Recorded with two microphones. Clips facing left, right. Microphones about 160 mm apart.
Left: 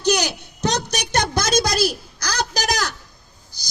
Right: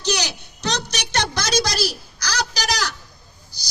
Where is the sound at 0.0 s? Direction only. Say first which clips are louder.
Left 5 dB; 50° left (ahead or behind).